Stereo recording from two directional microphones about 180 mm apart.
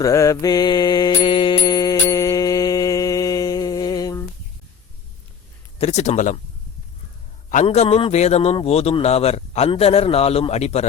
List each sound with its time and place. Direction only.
0.0 s mantra: 20° left (ahead or behind)
5.8 s a man's voice: 40° left (ahead or behind)
7.5 s a man's voice: 40° left (ahead or behind)